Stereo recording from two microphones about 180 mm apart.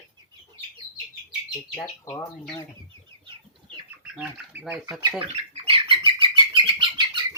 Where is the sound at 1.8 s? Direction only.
15° left (ahead or behind).